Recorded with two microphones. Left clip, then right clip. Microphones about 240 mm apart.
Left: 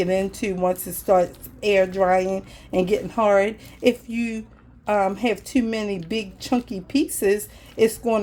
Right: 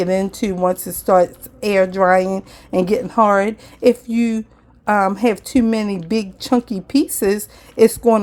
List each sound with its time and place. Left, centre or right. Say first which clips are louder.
0.0 s a woman's voice: right 4 dB; right